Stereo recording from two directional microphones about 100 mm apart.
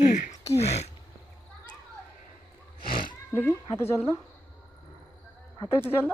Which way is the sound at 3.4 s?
25° left (ahead or behind).